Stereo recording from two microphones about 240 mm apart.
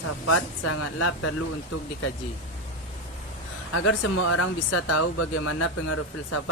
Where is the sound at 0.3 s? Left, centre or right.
Left.